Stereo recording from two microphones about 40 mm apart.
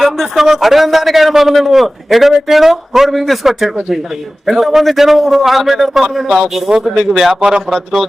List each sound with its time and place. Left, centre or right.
0.0 s a man's voice: centre
7.4 s speech: right